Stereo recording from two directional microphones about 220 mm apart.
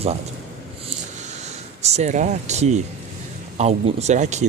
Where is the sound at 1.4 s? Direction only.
30° right (ahead or behind).